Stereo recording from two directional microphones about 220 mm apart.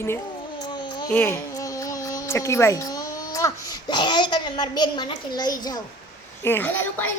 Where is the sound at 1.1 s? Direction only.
10° left (ahead or behind).